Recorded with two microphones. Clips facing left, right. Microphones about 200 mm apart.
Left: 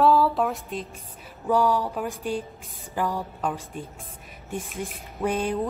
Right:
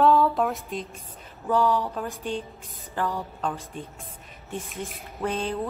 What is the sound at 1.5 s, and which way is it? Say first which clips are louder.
Music: left 1 dB; 10° left (ahead or behind).